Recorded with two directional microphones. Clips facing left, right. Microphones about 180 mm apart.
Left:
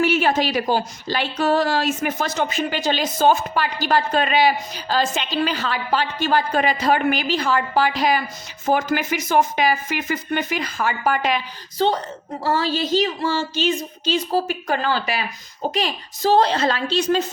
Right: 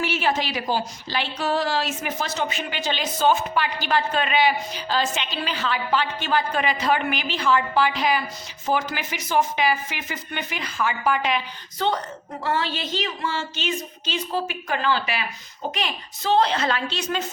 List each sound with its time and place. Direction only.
0.0 s a woman's voice: 45° left (ahead or behind)
11.8 s a woman's voice: 30° left (ahead or behind)